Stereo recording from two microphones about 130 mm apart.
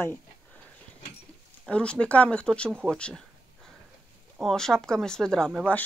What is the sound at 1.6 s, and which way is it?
Speech, 10° left (ahead or behind).